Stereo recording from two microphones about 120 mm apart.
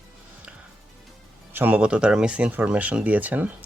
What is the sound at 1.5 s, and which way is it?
Speech, 15° right (ahead or behind).